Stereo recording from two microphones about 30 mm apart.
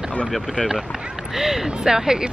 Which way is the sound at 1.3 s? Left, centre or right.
Centre.